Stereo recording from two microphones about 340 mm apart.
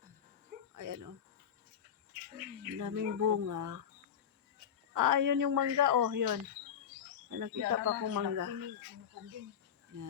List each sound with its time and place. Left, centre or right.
0.8 s cricket: right
2.7 s speech: right
4.9 s speech: right